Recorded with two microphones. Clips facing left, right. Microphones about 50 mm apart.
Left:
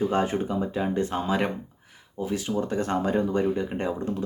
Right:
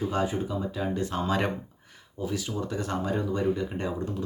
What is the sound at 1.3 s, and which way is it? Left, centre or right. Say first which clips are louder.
Speech: right 1 dB; centre.